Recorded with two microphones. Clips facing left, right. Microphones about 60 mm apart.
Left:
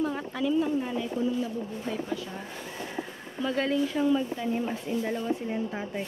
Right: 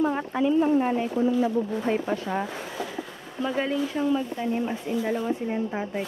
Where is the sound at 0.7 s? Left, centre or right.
Right.